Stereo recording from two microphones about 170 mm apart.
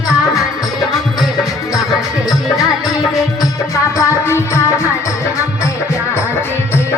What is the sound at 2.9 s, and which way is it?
Music, 20° left (ahead or behind).